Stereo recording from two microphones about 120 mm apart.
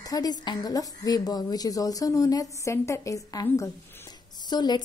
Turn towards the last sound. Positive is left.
turn(degrees=35)  # may be behind; listen again after turning